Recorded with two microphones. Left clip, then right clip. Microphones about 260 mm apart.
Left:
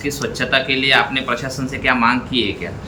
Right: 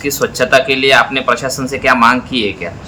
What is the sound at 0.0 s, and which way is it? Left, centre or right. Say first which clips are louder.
Speech: right 7 dB; right.